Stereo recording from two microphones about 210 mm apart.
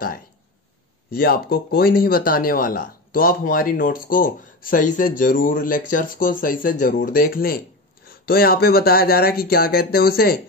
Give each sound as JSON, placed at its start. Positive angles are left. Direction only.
{"t": 1.1, "sound": "speech", "side_deg": 45}